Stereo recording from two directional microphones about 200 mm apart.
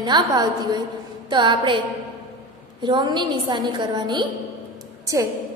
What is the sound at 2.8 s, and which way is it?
A woman's voice, 25° right (ahead or behind).